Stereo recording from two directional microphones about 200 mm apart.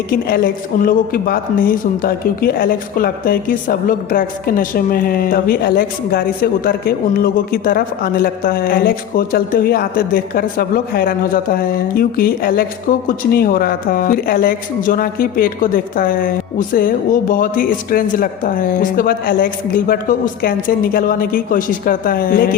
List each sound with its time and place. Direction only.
0.1 s a woman's voice: 45° left (ahead or behind)